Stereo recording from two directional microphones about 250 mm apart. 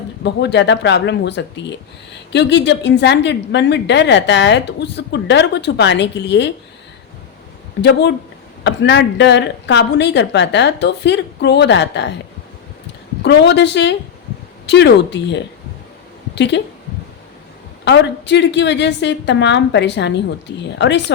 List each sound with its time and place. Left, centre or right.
0.3 s a woman's voice: left
7.8 s a woman's voice: left
13.2 s a woman's voice: left
17.8 s a woman's voice: left